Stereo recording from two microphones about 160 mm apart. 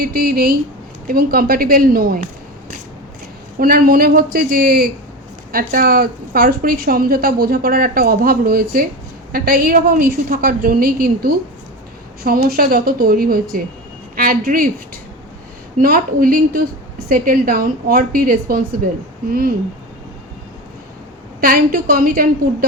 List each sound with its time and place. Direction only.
0.0 s a woman's voice: 70° right (ahead or behind)
3.6 s a woman's voice: 65° right (ahead or behind)
12.5 s a woman's voice: 70° right (ahead or behind)
15.8 s a woman's voice: 65° right (ahead or behind)
21.4 s a woman's voice: 65° right (ahead or behind)